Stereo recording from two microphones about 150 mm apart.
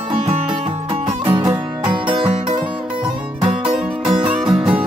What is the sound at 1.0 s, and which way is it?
Music, 35° right (ahead or behind).